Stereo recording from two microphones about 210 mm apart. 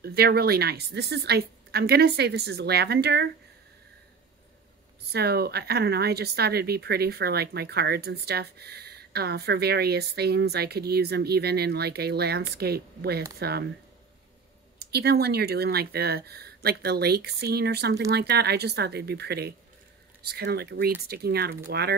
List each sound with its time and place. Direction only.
0.0 s speech: 50° right (ahead or behind)
5.1 s speech: 50° right (ahead or behind)
14.8 s speech: 50° right (ahead or behind)